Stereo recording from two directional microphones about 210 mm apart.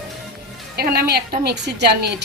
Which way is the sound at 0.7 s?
50° right (ahead or behind).